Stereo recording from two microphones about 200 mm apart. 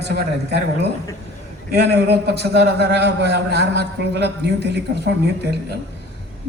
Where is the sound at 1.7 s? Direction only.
55° right (ahead or behind).